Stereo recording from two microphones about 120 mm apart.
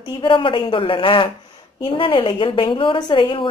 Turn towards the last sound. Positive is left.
turn(degrees=45)  # may be behind; listen again after turning